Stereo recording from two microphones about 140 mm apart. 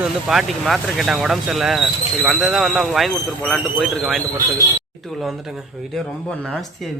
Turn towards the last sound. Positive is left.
turn(degrees=5)  # may be behind; listen again after turning